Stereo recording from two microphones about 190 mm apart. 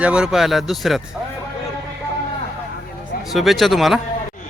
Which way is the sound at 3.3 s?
Centre (ahead or behind).